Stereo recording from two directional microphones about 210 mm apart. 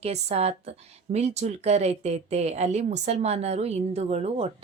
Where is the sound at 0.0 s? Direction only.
30° right (ahead or behind).